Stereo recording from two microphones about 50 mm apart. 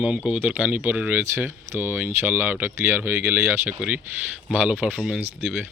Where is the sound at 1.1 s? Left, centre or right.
Right.